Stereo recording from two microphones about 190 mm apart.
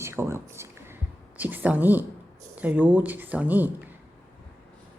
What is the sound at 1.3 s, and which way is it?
Speech, 10° right (ahead or behind).